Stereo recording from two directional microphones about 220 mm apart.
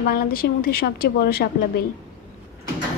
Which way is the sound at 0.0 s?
40° left (ahead or behind).